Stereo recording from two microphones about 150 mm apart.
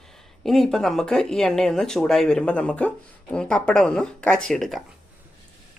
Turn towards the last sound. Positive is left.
turn(degrees=0)  # may be behind; listen again after turning